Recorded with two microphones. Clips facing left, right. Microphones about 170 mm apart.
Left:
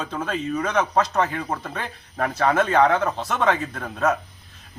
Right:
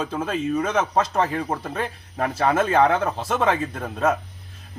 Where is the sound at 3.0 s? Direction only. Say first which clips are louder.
Even; 5° right (ahead or behind).